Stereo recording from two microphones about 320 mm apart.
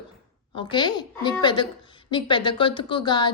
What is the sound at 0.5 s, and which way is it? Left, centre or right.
A woman's voice, centre.